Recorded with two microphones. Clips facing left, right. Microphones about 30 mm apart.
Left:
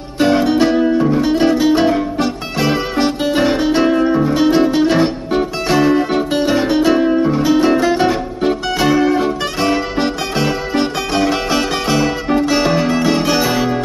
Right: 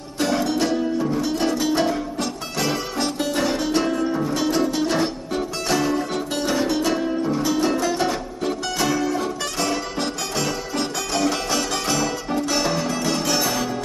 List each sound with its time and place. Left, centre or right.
0.2 s music: left